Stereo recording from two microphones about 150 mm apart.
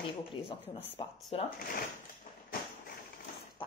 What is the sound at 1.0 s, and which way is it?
Speech, 40° left (ahead or behind).